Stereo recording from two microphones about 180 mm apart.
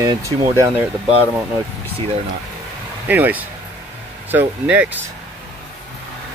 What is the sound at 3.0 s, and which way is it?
Speech, 10° right (ahead or behind).